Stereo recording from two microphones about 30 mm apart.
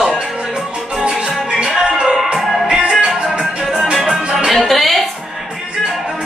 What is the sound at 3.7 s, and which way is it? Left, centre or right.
Music, centre.